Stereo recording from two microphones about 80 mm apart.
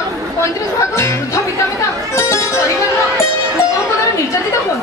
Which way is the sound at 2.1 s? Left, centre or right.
Left.